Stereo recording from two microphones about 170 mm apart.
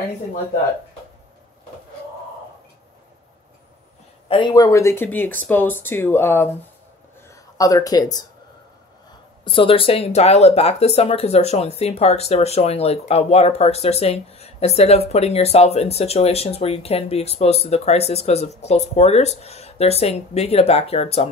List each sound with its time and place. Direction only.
4.3 s speech: 25° left (ahead or behind)
4.6 s speech: 15° left (ahead or behind)
7.2 s a sound: 20° left (ahead or behind)
9.4 s speech: 30° left (ahead or behind)